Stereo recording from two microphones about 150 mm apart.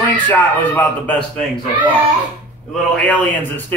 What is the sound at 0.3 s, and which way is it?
Speech, 10° left (ahead or behind).